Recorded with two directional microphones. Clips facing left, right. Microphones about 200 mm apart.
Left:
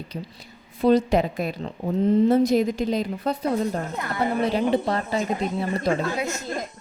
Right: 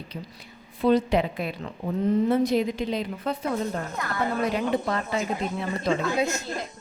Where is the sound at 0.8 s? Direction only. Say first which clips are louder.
Left 3 dB; 40° left (ahead or behind).